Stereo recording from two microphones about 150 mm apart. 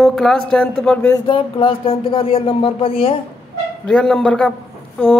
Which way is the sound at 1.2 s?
35° left (ahead or behind).